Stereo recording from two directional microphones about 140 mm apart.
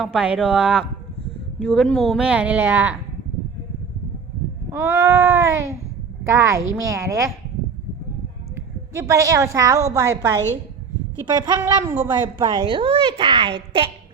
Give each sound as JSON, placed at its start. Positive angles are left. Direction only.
{"t": 0.0, "sound": "a woman's voice", "side_deg": -5}
{"t": 4.7, "sound": "baby cry", "side_deg": -20}
{"t": 8.9, "sound": "baby cry", "side_deg": -20}
{"t": 11.3, "sound": "a woman's voice", "side_deg": -30}